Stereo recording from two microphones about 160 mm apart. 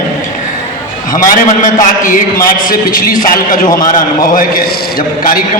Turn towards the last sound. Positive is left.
turn(degrees=55)  # may be behind; listen again after turning